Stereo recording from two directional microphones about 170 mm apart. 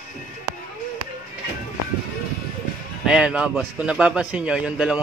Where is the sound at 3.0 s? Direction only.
5° right (ahead or behind).